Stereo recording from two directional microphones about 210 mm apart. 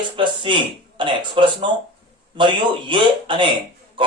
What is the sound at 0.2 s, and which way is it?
Speech, 25° right (ahead or behind).